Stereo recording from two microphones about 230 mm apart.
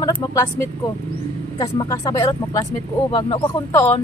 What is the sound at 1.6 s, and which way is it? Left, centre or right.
Speech, centre.